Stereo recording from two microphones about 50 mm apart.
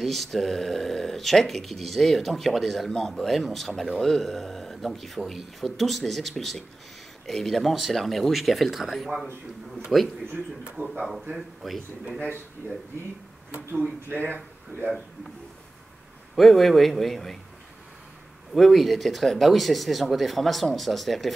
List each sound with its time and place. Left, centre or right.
0.0 s speech: centre
14.0 s speech: right
16.3 s speech: centre
18.5 s speech: centre